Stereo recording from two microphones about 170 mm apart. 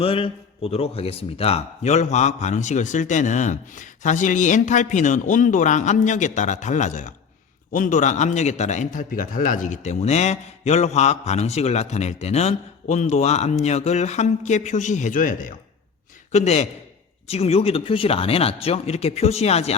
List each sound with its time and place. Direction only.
0.0 s a man's voice: 35° left (ahead or behind)